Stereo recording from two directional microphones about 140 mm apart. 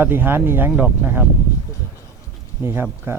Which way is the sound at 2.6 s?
15° right (ahead or behind).